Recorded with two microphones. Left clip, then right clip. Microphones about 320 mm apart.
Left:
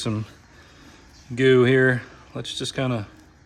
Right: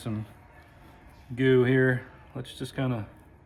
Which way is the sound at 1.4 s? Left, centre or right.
Left.